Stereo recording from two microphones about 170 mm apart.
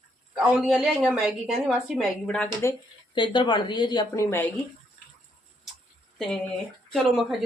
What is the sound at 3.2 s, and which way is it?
A woman's voice, 25° left (ahead or behind).